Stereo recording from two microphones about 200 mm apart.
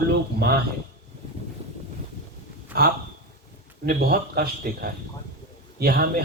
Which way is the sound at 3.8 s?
50° right (ahead or behind).